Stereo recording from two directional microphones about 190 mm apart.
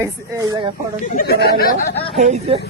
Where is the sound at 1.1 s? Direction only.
55° left (ahead or behind).